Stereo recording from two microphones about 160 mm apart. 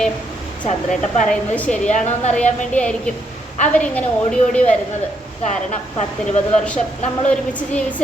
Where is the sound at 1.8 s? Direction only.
45° left (ahead or behind).